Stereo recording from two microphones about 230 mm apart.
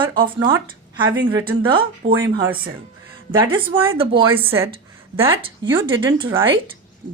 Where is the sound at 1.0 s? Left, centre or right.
Right.